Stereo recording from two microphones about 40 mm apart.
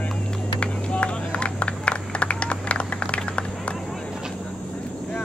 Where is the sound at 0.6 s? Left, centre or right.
Left.